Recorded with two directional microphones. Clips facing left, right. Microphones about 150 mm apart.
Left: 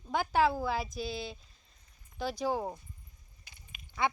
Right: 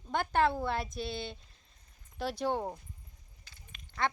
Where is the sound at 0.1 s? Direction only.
5° left (ahead or behind).